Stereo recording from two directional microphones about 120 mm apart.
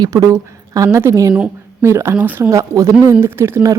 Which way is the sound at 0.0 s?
30° right (ahead or behind).